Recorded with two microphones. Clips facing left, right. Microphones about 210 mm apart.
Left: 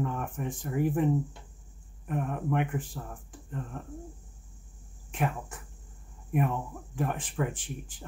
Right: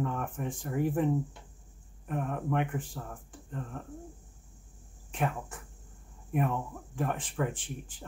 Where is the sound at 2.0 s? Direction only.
10° left (ahead or behind).